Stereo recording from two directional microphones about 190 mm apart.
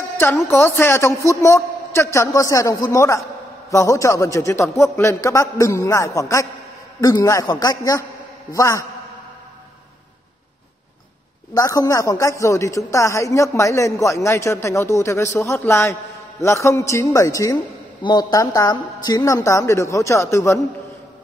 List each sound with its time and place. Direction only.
0.2 s a man's voice: 10° left (ahead or behind)
11.5 s speech: 20° left (ahead or behind)